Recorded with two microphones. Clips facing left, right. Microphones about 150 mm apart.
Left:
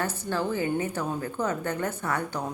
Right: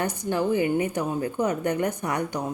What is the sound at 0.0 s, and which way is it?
Speech, 15° right (ahead or behind).